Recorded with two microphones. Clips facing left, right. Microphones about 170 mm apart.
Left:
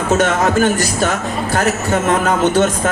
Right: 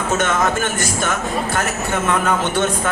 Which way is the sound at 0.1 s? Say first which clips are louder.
Left 5 dB; 35° left (ahead or behind).